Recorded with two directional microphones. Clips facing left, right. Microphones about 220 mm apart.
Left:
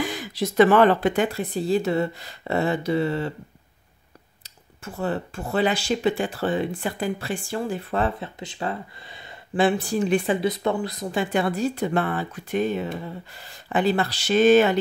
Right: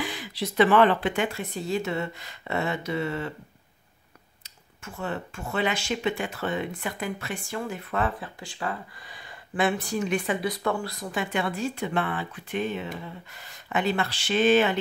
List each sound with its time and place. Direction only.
0.0 s speech: 45° left (ahead or behind)
4.4 s speech: 35° left (ahead or behind)